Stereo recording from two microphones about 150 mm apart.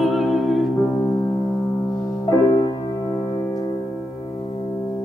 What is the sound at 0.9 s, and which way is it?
Music, 20° left (ahead or behind).